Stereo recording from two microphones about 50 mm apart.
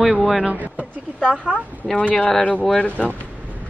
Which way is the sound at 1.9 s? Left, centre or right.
Left.